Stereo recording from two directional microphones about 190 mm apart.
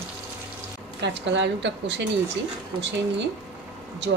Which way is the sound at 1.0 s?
70° right (ahead or behind).